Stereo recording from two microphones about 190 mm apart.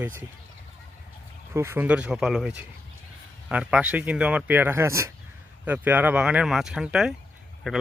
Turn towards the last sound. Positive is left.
turn(degrees=-5)  # may be behind; listen again after turning